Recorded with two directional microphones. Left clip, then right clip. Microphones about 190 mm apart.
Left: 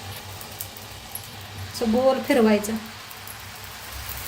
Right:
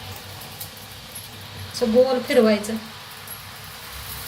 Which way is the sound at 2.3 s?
45° left (ahead or behind).